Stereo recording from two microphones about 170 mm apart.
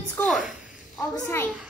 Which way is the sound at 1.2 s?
10° left (ahead or behind).